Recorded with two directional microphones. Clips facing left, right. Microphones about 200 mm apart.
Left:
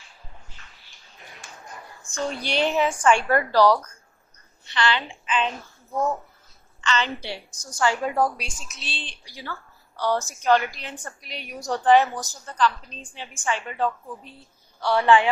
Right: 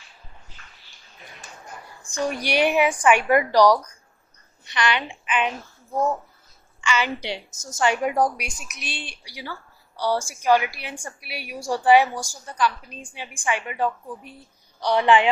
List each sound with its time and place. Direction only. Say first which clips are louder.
2.0 s a woman's voice: right 3 dB; 15° right (ahead or behind)
6.8 s a woman's voice: right 1 dB; 10° right (ahead or behind)